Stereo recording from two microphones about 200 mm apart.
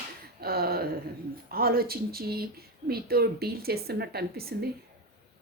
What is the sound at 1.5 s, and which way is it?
A woman's voice, 50° right (ahead or behind).